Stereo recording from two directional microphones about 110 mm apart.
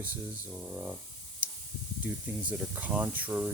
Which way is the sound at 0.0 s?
10° right (ahead or behind).